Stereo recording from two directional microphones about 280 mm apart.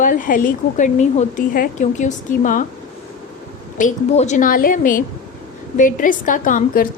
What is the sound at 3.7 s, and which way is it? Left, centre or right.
A woman's voice, left.